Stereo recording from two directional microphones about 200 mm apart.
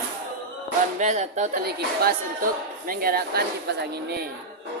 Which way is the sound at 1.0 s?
35° right (ahead or behind).